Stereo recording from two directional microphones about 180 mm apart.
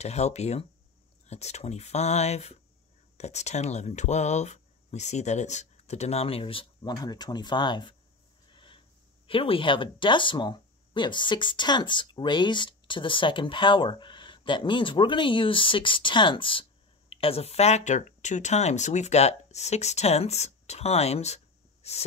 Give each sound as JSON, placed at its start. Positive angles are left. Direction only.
{"t": 0.0, "sound": "speech", "side_deg": 40}
{"t": 8.5, "sound": "a sound", "side_deg": 30}
{"t": 9.3, "sound": "speech", "side_deg": 30}